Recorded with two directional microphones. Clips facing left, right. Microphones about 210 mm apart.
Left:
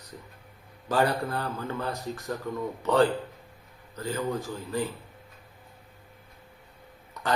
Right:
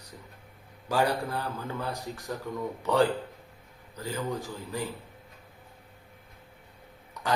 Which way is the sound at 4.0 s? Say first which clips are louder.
Left 3 dB; 15° right (ahead or behind).